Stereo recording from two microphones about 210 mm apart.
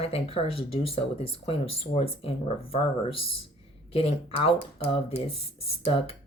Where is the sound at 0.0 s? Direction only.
30° left (ahead or behind).